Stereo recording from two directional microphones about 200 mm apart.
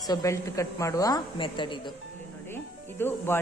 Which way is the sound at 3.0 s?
10° left (ahead or behind).